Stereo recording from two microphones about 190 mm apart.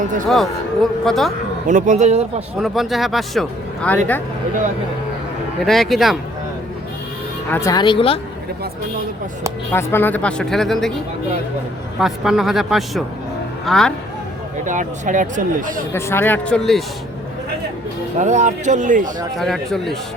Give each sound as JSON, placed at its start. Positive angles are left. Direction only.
{"t": 0.3, "sound": "speech", "side_deg": 0}
{"t": 1.6, "sound": "speech", "side_deg": -40}
{"t": 2.6, "sound": "speech", "side_deg": 0}
{"t": 5.6, "sound": "speech", "side_deg": 0}
{"t": 7.5, "sound": "speech", "side_deg": 20}
{"t": 9.7, "sound": "speech", "side_deg": 10}
{"t": 11.9, "sound": "speech", "side_deg": 0}
{"t": 14.6, "sound": "speech", "side_deg": -40}
{"t": 15.9, "sound": "speech", "side_deg": 15}
{"t": 18.2, "sound": "speech", "side_deg": -40}
{"t": 19.4, "sound": "speech", "side_deg": 0}